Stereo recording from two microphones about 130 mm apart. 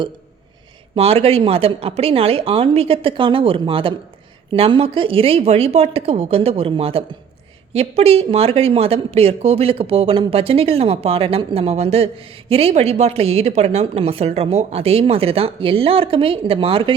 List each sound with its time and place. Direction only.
0.9 s speech: 50° right (ahead or behind)